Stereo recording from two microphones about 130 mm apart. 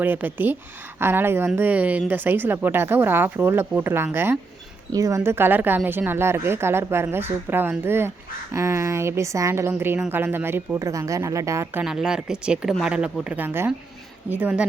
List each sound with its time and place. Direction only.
0.0 s a woman's voice: 15° right (ahead or behind)
11.8 s a woman's voice: 5° right (ahead or behind)